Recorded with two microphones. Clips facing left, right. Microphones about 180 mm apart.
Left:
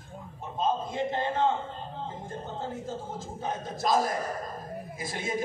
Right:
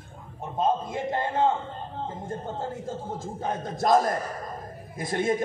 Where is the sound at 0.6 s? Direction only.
55° right (ahead or behind).